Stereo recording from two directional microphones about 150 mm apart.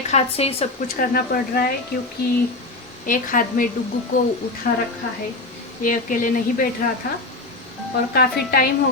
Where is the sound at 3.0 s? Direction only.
65° left (ahead or behind).